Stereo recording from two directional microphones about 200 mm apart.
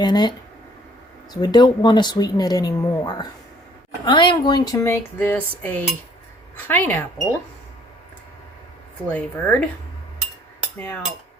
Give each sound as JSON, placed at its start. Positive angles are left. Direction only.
{"t": 0.0, "sound": "speech", "side_deg": 20}
{"t": 9.0, "sound": "speech", "side_deg": 5}
{"t": 10.8, "sound": "speech", "side_deg": 10}